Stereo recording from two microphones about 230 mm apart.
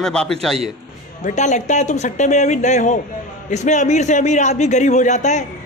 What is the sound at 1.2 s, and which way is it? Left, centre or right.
A man's voice, left.